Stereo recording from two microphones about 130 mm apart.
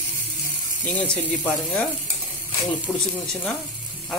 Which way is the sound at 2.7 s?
10° left (ahead or behind).